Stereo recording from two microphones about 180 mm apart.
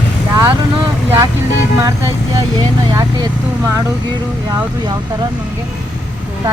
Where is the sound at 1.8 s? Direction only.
20° right (ahead or behind).